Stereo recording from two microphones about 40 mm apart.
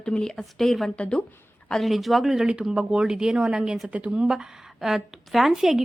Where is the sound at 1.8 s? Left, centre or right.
Centre.